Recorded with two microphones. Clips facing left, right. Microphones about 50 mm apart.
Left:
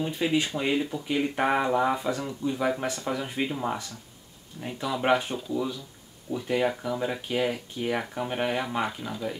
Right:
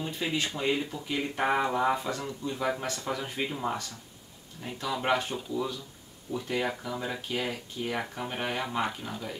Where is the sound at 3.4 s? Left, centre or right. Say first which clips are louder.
Left 2 dB; centre.